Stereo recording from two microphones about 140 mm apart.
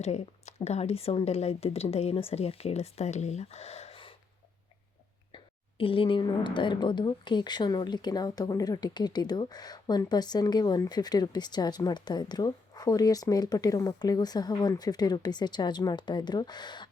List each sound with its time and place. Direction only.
0.0 s a woman's voice: 50° left (ahead or behind)
5.3 s speech: 40° left (ahead or behind)